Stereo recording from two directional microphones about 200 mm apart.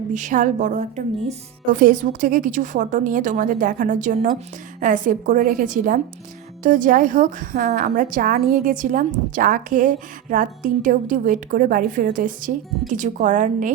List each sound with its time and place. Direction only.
0.1 s a woman's voice: 40° right (ahead or behind)